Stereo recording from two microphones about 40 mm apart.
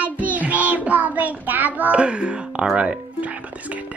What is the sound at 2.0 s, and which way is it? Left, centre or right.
Speech, right.